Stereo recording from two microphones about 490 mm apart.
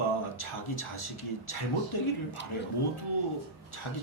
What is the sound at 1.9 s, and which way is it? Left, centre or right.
Speech, left.